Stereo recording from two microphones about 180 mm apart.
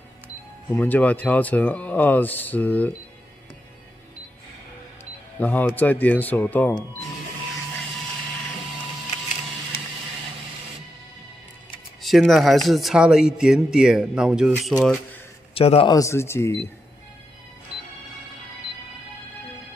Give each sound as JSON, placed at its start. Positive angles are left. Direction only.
{"t": 0.7, "sound": "speech", "side_deg": 10}
{"t": 5.4, "sound": "speech", "side_deg": 10}
{"t": 12.0, "sound": "speech", "side_deg": 0}
{"t": 15.5, "sound": "a man's voice", "side_deg": 30}
{"t": 15.9, "sound": "speech", "side_deg": 15}